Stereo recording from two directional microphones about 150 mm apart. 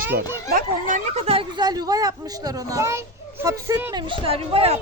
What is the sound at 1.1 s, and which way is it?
Speech, 40° right (ahead or behind).